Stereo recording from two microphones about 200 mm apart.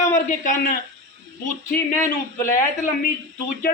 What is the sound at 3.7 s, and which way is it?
Speech, 50° left (ahead or behind).